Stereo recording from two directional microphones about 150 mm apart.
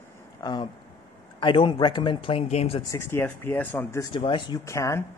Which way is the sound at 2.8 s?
20° left (ahead or behind).